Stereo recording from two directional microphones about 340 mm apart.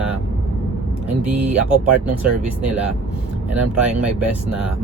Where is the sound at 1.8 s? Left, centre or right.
Right.